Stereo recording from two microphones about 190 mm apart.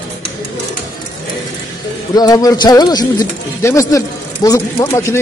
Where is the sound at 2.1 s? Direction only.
20° left (ahead or behind).